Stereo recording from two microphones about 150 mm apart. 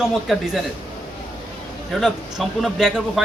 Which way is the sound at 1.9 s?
Centre (ahead or behind).